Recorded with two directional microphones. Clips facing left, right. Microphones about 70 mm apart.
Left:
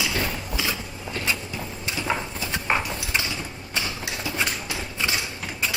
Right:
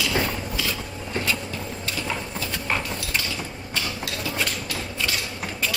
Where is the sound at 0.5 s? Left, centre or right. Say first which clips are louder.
Left 1 dB; centre.